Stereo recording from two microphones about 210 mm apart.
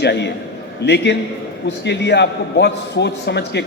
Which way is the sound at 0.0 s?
55° left (ahead or behind).